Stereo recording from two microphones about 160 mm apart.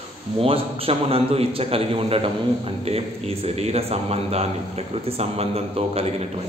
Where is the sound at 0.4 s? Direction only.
35° right (ahead or behind).